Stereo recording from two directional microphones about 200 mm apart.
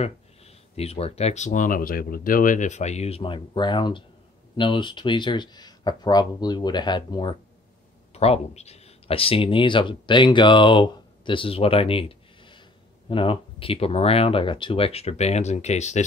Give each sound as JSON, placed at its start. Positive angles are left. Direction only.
{"t": 0.0, "sound": "speech", "side_deg": 30}